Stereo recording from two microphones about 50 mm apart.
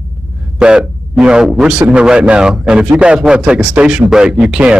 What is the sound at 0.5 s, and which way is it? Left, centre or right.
A man's voice, centre.